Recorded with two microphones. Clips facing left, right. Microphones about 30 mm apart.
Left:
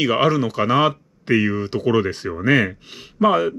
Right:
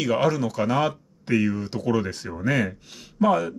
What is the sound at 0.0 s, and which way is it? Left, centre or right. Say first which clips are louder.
Speech: left 4 dB; left.